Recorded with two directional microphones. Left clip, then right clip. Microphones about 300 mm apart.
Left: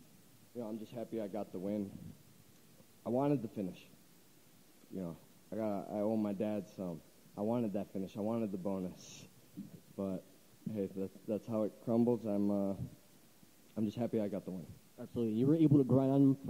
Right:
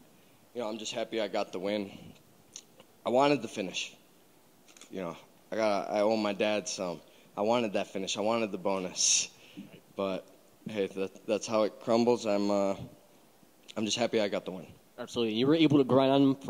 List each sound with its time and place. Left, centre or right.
0.8 s a man's voice: centre
3.0 s a man's voice: centre
4.9 s a man's voice: centre
13.7 s a man's voice: centre
14.4 s a man's voice: right
15.1 s a man's voice: centre